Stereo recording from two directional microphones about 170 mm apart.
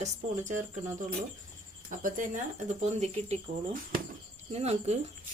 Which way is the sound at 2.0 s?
50° right (ahead or behind).